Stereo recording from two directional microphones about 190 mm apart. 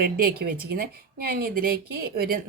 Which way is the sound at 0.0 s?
55° right (ahead or behind).